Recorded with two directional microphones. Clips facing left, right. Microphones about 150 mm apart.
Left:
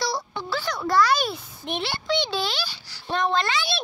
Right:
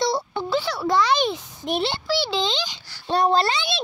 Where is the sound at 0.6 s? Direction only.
15° right (ahead or behind).